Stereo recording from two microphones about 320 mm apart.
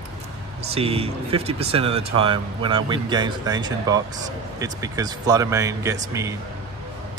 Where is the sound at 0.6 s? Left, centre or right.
Centre.